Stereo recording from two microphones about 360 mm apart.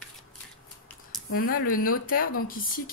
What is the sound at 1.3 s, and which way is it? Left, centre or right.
Speech, left.